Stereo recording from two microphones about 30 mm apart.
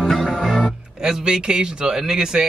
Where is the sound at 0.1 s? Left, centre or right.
Centre.